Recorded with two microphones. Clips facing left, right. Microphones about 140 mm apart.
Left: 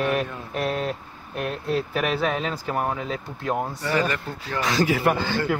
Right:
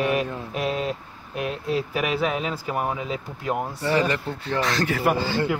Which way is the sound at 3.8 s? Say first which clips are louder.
Right 2 dB; 30° right (ahead or behind).